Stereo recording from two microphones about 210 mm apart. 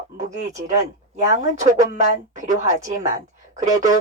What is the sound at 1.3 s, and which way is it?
Speech, 35° right (ahead or behind).